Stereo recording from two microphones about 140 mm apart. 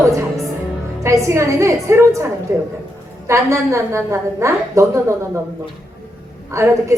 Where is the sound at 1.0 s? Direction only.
20° right (ahead or behind).